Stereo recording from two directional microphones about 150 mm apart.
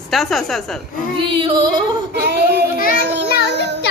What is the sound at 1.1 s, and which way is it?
Female singing, 35° right (ahead or behind).